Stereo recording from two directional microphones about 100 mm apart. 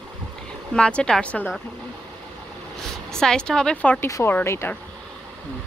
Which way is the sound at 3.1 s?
5° left (ahead or behind).